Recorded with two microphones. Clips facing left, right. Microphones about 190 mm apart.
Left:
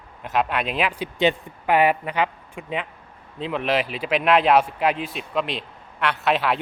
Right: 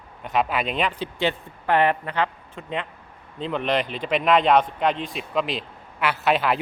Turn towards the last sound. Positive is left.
turn(degrees=0)  # may be behind; listen again after turning